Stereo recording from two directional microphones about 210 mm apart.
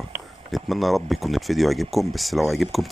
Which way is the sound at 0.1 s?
Centre (ahead or behind).